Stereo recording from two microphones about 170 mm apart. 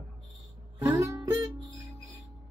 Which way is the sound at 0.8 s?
15° right (ahead or behind).